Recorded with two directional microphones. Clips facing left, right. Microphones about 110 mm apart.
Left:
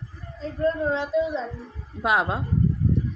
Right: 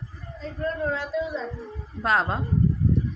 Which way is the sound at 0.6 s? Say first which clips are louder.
Left 4 dB; 25° left (ahead or behind).